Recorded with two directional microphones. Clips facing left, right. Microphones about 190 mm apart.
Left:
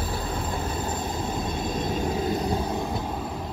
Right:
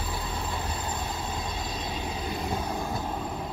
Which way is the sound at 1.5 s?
50° left (ahead or behind).